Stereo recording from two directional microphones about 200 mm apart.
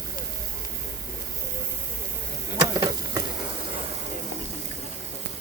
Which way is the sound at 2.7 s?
20° right (ahead or behind).